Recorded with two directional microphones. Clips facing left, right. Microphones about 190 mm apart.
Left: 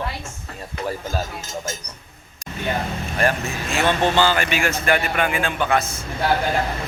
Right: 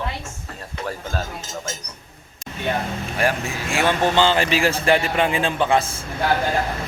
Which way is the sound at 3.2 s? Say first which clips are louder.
Left 1 dB; 10° right (ahead or behind).